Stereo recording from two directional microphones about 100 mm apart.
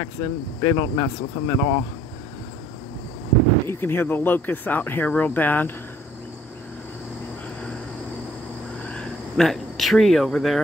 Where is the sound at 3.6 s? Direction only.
20° left (ahead or behind).